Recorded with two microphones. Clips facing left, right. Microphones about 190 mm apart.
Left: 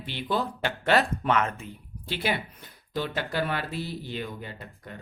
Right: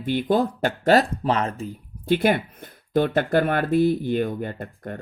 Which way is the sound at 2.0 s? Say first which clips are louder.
Right 10 dB; 50° right (ahead or behind).